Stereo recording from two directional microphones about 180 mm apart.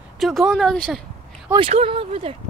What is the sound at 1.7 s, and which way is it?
Speech, 30° right (ahead or behind).